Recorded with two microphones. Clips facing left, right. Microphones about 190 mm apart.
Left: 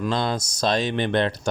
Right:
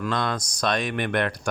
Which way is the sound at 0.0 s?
30° left (ahead or behind).